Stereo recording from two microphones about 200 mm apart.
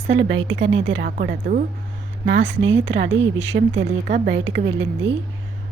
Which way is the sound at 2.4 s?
65° right (ahead or behind).